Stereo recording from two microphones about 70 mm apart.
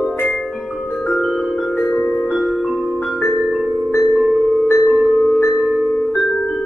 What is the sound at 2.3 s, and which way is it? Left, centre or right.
Music, centre.